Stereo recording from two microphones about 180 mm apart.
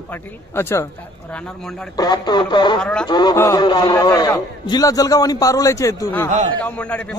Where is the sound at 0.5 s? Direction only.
15° left (ahead or behind).